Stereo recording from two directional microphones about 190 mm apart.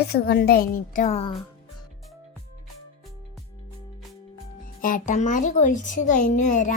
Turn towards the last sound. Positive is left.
turn(degrees=40)  # may be behind; listen again after turning